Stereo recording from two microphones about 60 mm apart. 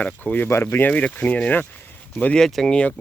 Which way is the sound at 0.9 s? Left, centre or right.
Left.